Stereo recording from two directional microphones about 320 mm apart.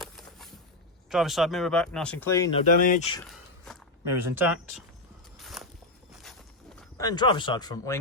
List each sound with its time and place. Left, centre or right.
0.0 s a sound: centre
1.1 s speech: centre
2.7 s speech: left
4.4 s speech: centre
5.4 s walk: centre
6.1 s a sound: centre